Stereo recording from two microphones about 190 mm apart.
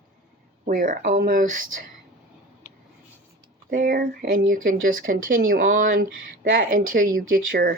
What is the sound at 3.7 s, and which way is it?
Speech, 50° right (ahead or behind).